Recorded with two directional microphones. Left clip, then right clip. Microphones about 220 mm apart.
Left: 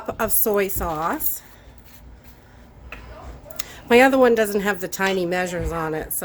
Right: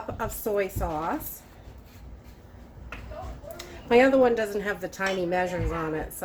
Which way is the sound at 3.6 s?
50° left (ahead or behind).